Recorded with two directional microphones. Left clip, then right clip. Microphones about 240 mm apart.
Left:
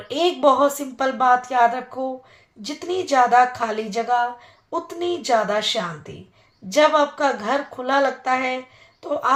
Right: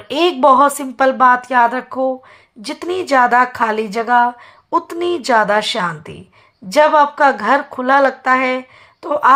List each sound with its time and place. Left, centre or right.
0.1 s a woman's voice: right